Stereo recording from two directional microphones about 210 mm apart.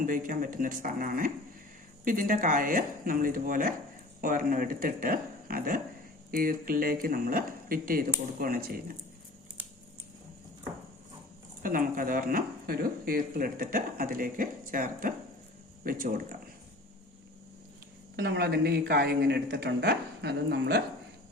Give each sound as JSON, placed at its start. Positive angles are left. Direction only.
{"t": 0.0, "sound": "speech", "side_deg": -40}
{"t": 11.6, "sound": "speech", "side_deg": -40}
{"t": 18.2, "sound": "speech", "side_deg": -50}